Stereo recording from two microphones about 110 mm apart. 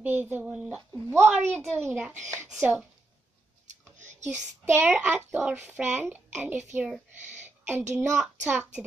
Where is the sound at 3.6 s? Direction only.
90° right.